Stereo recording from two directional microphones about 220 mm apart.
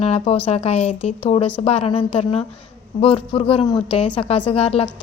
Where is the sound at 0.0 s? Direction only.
30° left (ahead or behind).